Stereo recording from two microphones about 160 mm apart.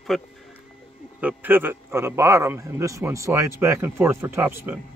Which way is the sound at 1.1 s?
10° right (ahead or behind).